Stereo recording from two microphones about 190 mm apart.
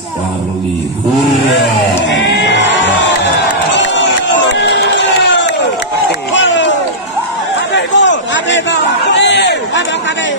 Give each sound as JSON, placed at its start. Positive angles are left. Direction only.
{"t": 2.0, "sound": "music", "side_deg": 70}
{"t": 3.7, "sound": "crowd", "side_deg": 70}
{"t": 6.3, "sound": "a sound", "side_deg": 75}
{"t": 7.7, "sound": "chatter", "side_deg": 70}